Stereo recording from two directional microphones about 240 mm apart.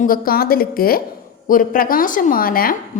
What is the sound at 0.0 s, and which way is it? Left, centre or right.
A woman's voice, left.